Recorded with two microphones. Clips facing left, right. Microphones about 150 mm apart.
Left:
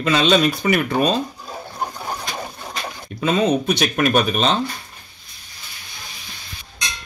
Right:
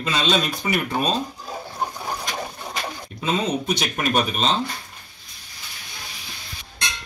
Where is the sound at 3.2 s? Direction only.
65° left (ahead or behind).